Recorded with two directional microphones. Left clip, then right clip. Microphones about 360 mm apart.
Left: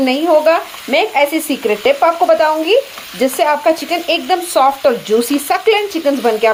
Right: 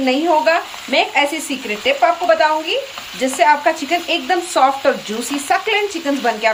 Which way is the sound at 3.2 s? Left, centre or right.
Centre.